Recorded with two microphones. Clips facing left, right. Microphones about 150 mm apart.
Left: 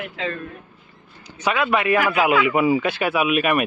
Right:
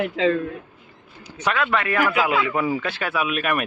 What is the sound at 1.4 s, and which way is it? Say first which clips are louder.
Speech: left 3 dB; 10° left (ahead or behind).